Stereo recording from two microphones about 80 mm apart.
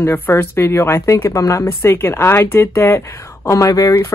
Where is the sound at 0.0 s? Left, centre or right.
Left.